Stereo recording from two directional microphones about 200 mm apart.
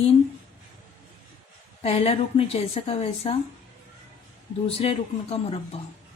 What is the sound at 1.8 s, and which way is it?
A woman's voice, 30° left (ahead or behind).